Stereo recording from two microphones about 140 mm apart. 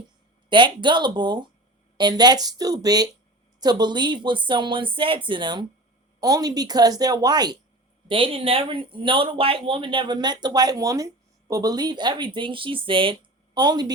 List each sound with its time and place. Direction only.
0.5 s a woman's voice: 35° right (ahead or behind)